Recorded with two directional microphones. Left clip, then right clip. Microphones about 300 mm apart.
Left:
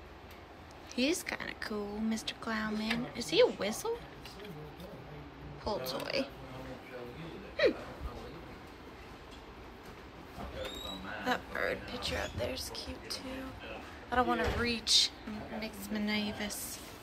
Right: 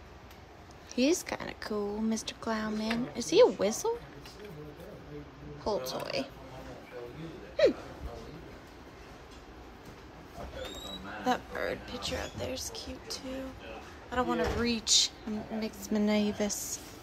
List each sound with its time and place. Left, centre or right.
0.9 s speech: centre
5.6 s speech: centre
7.6 s gasp: centre
11.2 s a woman's voice: centre